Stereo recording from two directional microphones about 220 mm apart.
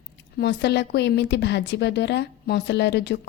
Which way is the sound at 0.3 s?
50° left (ahead or behind).